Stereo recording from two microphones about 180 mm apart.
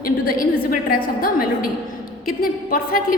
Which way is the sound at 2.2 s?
50° left (ahead or behind).